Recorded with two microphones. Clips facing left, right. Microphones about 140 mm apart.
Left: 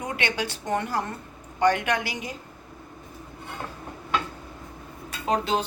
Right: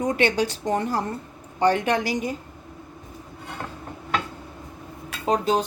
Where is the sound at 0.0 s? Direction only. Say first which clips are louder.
Right 7 dB; 40° right (ahead or behind).